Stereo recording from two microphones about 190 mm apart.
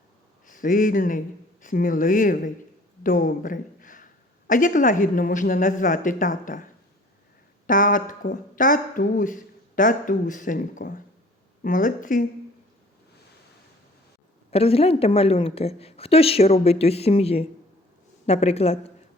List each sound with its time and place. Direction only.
0.4 s speech: 45° left (ahead or behind)
7.7 s speech: 45° left (ahead or behind)
14.5 s speech: 30° left (ahead or behind)